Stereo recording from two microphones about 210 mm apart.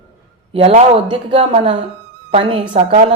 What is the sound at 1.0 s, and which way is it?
A woman's voice, 25° right (ahead or behind).